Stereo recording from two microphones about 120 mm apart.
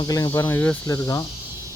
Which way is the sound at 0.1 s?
30° left (ahead or behind).